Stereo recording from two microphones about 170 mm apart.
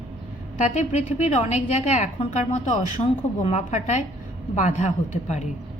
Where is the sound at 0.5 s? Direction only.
40° left (ahead or behind).